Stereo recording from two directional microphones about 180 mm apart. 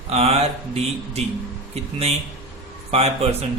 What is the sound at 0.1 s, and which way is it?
A man's voice, 35° right (ahead or behind).